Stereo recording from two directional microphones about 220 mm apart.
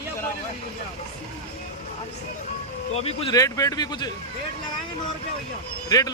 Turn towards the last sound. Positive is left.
turn(degrees=15)  # may be behind; listen again after turning